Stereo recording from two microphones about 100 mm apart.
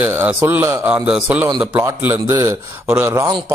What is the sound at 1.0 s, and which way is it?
Speech, 10° right (ahead or behind).